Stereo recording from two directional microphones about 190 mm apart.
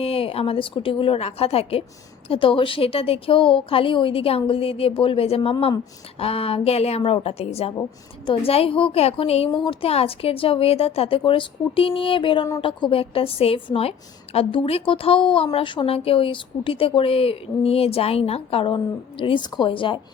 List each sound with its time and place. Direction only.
0.0 s a woman's voice: 30° left (ahead or behind)